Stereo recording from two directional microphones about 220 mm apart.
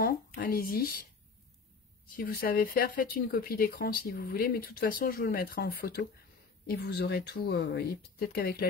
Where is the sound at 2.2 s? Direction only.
40° left (ahead or behind).